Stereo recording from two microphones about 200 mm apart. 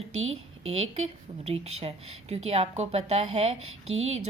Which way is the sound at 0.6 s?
30° right (ahead or behind).